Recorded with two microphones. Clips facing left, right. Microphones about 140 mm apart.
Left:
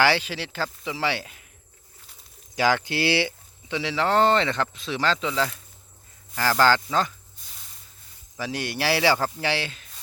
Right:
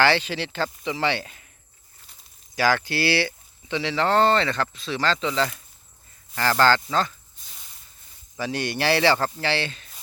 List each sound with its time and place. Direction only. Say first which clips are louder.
0.0 s speech: right 1 dB; 10° left (ahead or behind)
2.6 s speech: even; 15° left (ahead or behind)
8.4 s speech: right 2 dB; 5° left (ahead or behind)